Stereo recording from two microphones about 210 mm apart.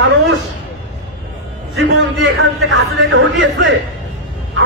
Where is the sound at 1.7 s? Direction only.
60° right (ahead or behind).